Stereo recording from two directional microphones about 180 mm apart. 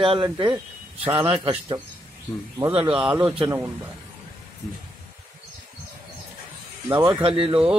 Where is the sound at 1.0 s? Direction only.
10° right (ahead or behind).